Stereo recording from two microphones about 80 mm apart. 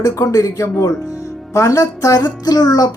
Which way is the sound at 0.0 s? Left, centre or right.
Left.